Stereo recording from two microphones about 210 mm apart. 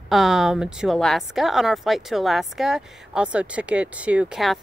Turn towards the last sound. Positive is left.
turn(degrees=0)  # may be behind; listen again after turning